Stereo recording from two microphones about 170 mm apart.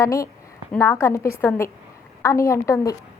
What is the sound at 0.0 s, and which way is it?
A woman's voice, 20° left (ahead or behind).